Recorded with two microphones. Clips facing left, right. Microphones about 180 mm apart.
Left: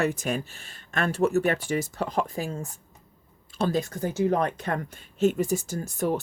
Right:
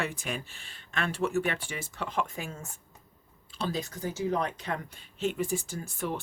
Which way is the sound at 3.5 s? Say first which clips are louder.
Left 7 dB; 50° left (ahead or behind).